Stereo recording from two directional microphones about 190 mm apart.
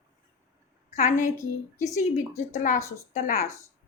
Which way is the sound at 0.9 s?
40° left (ahead or behind).